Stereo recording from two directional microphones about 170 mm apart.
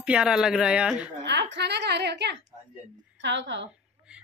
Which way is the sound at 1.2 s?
90° right.